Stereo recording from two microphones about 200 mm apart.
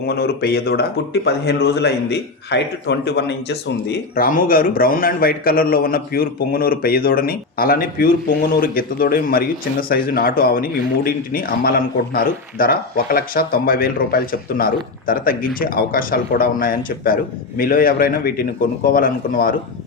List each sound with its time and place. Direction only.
0.0 s speech: 50° left (ahead or behind)